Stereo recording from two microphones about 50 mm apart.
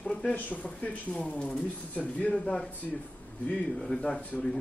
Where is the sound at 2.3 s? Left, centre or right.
Centre.